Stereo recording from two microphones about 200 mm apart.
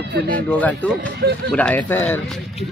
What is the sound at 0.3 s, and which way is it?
Speech, 5° left (ahead or behind).